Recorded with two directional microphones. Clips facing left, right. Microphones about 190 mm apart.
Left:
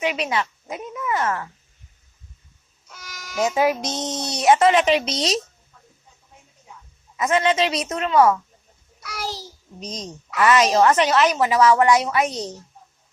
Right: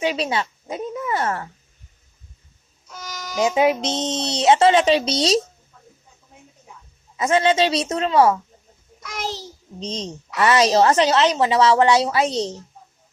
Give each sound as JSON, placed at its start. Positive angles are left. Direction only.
{"t": 0.0, "sound": "speech", "side_deg": -30}
{"t": 3.4, "sound": "a woman's voice", "side_deg": -20}
{"t": 7.2, "sound": "a woman's voice", "side_deg": -30}
{"t": 9.8, "sound": "a woman's voice", "side_deg": -30}